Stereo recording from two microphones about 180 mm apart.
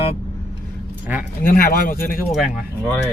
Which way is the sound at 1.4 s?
55° left (ahead or behind).